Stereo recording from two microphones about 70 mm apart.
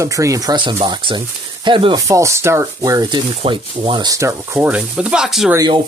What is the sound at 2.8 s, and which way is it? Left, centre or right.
Speech, right.